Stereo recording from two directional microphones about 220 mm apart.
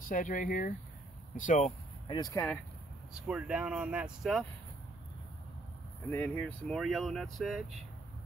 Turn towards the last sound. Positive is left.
turn(degrees=0)  # may be behind; listen again after turning